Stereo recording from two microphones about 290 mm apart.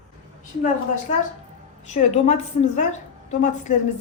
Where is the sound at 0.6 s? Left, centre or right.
Left.